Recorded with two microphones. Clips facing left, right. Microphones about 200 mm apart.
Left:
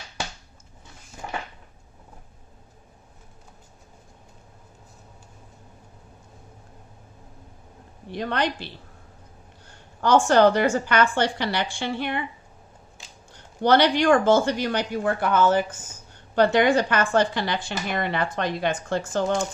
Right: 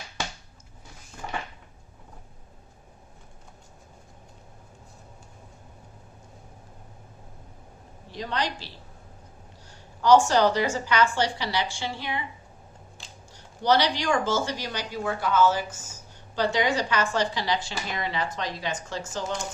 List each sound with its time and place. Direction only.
8.1 s speech: 60° left (ahead or behind)
13.3 s speech: 55° left (ahead or behind)